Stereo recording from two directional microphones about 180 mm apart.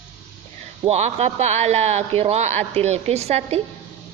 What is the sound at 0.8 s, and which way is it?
Speech, 35° right (ahead or behind).